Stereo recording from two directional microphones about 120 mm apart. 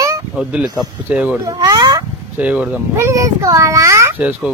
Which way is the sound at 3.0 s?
25° right (ahead or behind).